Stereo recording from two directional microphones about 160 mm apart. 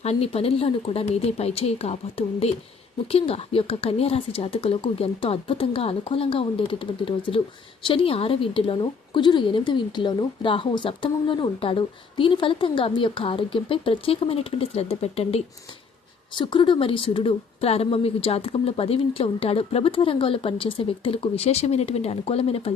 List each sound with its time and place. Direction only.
0.0 s speech: 40° left (ahead or behind)